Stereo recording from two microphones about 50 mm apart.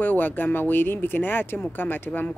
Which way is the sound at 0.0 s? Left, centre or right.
Left.